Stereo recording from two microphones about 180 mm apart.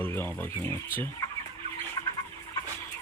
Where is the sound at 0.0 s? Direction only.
10° left (ahead or behind).